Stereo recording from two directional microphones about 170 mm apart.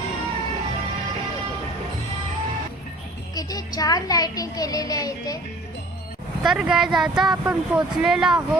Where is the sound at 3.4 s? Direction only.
20° left (ahead or behind).